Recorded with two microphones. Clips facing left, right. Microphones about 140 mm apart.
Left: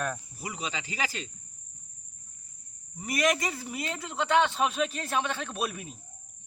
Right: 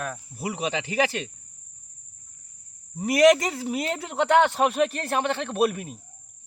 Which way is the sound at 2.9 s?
65° right (ahead or behind).